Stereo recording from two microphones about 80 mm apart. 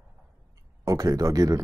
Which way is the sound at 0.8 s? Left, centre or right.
Right.